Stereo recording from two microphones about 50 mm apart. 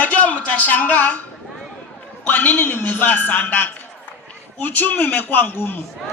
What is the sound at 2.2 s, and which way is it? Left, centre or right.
A man's voice, left.